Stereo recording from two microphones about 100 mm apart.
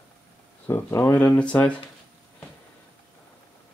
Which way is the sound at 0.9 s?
30° left (ahead or behind).